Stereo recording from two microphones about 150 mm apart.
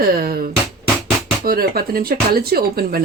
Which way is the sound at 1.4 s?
80° right.